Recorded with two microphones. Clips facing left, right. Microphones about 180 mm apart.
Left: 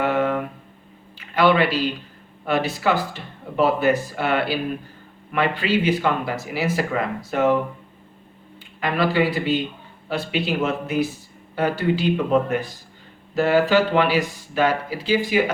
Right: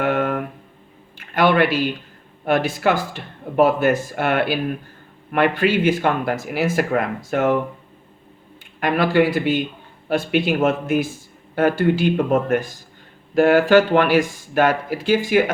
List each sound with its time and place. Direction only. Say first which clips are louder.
0.0 s a sound: right 1 dB; 55° right (ahead or behind)
2.4 s speech: right 3 dB; 50° right (ahead or behind)
8.8 s speech: right 3 dB; 50° right (ahead or behind)